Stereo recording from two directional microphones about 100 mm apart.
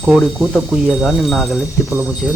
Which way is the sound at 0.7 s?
5° right (ahead or behind).